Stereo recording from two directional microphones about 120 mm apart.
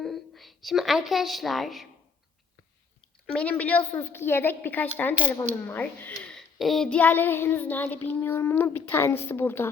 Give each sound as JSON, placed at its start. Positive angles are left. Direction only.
{"t": 0.0, "sound": "a woman's voice", "side_deg": 0}
{"t": 3.3, "sound": "child singing", "side_deg": 10}
{"t": 6.1, "sound": "child singing", "side_deg": 5}